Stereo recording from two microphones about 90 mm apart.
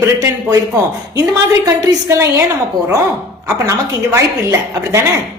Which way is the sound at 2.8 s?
70° left (ahead or behind).